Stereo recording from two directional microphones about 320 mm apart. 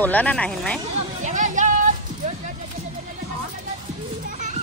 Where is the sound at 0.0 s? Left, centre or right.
Centre.